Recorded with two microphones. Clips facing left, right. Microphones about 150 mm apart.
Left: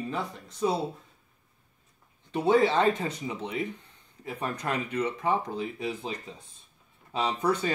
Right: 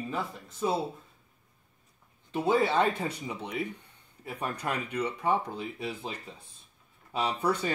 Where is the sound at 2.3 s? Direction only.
5° right (ahead or behind).